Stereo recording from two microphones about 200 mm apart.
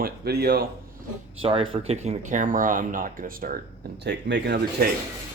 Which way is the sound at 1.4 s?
25° right (ahead or behind).